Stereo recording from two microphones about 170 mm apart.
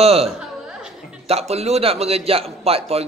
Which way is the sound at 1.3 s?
40° right (ahead or behind).